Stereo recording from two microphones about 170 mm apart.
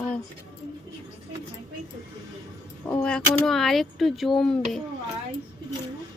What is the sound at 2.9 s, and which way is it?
Speech, 5° left (ahead or behind).